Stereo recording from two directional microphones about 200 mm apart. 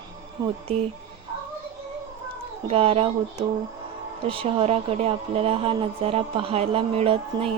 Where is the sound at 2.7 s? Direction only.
30° right (ahead or behind).